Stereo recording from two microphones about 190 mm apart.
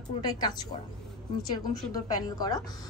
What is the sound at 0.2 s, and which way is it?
A woman's voice, 20° left (ahead or behind).